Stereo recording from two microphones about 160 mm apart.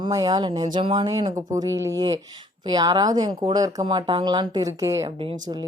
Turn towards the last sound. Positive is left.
turn(degrees=-30)  # may be behind; listen again after turning